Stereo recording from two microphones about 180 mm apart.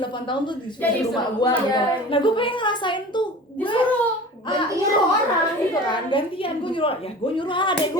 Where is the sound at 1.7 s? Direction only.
30° left (ahead or behind).